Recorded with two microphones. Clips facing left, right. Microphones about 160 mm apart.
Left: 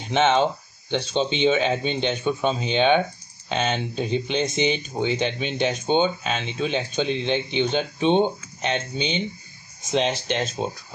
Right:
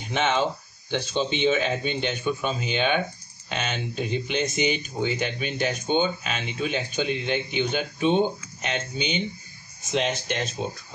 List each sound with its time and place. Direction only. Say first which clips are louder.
0.1 s speech: left 5 dB; 25° left (ahead or behind)